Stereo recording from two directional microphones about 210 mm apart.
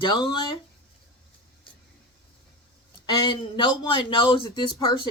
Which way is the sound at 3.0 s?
20° left (ahead or behind).